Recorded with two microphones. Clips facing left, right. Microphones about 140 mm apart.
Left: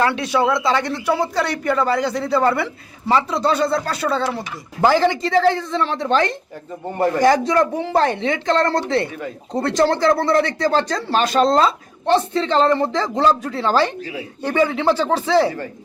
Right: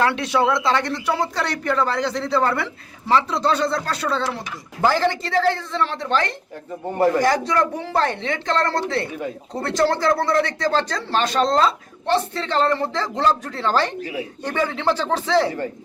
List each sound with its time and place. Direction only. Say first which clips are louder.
0.0 s speech: left 1 dB; centre (ahead or behind); by 6.1 s 20° left (ahead or behind)
6.8 s speech: right 1 dB; centre (ahead or behind)
7.2 s speech: left 4 dB; 20° left (ahead or behind)